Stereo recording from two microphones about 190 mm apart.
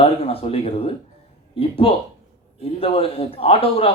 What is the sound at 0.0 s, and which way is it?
Speech, 30° left (ahead or behind).